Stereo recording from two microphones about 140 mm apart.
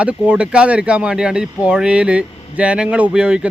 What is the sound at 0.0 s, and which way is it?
Speech, 10° right (ahead or behind).